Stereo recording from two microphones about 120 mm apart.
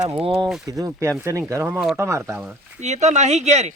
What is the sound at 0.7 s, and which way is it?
Speech, 30° right (ahead or behind).